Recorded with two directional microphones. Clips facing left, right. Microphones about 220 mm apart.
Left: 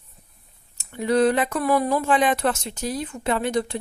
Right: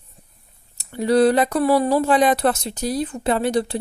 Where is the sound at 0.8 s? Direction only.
35° right (ahead or behind).